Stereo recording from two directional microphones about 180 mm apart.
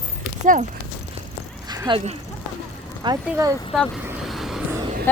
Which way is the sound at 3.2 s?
15° right (ahead or behind).